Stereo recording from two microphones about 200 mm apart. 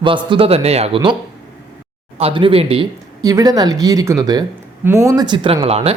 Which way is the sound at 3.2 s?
15° right (ahead or behind).